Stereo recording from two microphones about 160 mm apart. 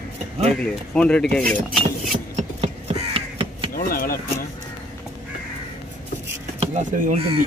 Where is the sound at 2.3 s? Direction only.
40° right (ahead or behind).